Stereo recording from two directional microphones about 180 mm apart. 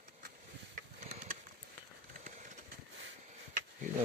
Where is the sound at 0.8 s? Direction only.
45° right (ahead or behind).